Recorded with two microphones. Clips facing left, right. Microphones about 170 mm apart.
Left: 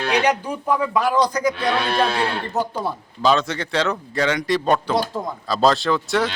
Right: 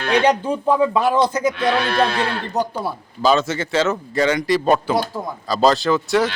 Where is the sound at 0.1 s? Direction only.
30° right (ahead or behind); by 6.2 s centre (ahead or behind).